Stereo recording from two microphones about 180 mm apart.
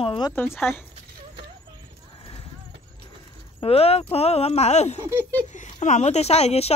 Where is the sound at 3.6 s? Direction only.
35° left (ahead or behind).